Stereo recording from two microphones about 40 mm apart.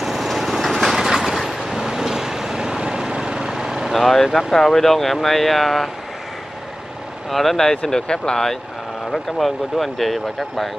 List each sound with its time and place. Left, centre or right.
0.0 s vehicle: centre
3.9 s speech: centre
7.2 s speech: centre
7.7 s speech: left
9.1 s speech: centre